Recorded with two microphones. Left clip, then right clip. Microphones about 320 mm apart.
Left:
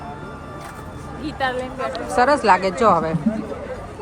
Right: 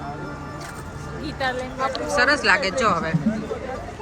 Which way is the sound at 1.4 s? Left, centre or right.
Left.